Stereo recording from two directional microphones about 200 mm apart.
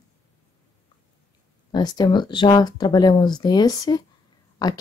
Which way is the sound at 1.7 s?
20° left (ahead or behind).